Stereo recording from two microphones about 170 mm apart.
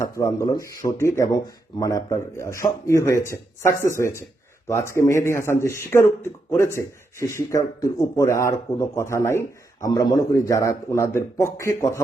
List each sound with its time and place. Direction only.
0.0 s speech: 20° left (ahead or behind)